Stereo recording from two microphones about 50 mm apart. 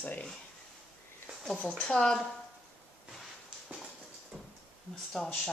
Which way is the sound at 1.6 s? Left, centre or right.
Centre.